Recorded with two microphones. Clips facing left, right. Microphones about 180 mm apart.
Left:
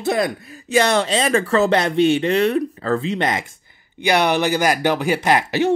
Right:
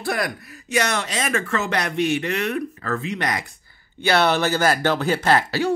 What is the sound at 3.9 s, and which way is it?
Speech, 15° left (ahead or behind).